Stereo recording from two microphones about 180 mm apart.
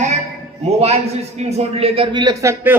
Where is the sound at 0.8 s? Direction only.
35° right (ahead or behind).